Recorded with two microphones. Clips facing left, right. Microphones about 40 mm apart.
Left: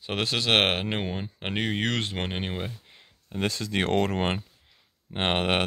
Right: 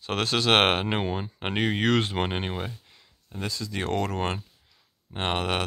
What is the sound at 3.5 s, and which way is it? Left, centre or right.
Speech, left.